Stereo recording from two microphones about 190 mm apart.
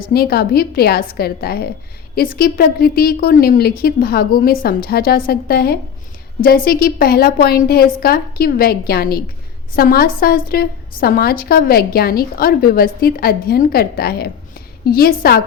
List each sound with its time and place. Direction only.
0.1 s a woman's voice: 55° left (ahead or behind)